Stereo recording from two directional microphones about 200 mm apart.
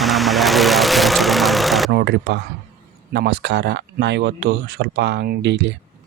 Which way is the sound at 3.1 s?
60° right (ahead or behind).